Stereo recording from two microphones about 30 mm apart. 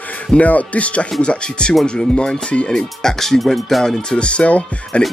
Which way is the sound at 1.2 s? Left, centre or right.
Left.